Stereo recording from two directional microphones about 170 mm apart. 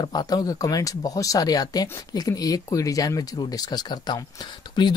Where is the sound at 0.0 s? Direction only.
25° left (ahead or behind).